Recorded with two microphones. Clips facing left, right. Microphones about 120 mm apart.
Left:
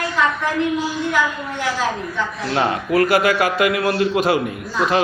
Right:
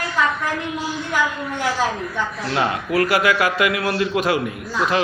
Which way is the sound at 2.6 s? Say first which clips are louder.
Left 3 dB; 35° left (ahead or behind).